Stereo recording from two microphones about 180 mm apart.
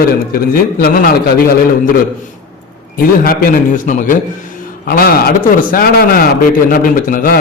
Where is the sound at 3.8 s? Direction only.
45° left (ahead or behind).